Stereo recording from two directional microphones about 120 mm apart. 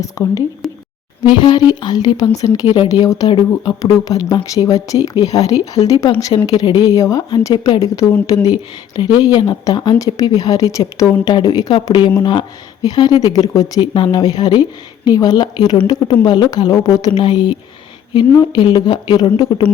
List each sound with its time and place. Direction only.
0.0 s speech: 30° left (ahead or behind)
0.6 s a sound: centre (ahead or behind)
1.2 s speech: 40° left (ahead or behind)
2.6 s speech: 50° left (ahead or behind)
2.9 s speech: 30° left (ahead or behind)